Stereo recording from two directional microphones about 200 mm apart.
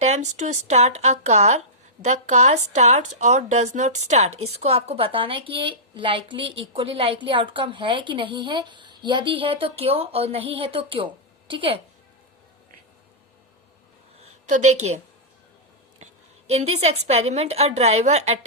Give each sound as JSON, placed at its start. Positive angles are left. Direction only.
{"t": 0.0, "sound": "a woman's voice", "side_deg": -35}
{"t": 14.2, "sound": "a woman's voice", "side_deg": -35}
{"t": 16.5, "sound": "speech", "side_deg": -35}